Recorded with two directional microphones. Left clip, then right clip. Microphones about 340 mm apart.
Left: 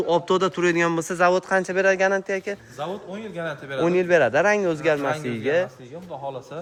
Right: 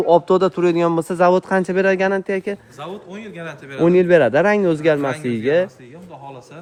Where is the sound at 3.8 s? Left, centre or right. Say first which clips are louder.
Right 6 dB; right.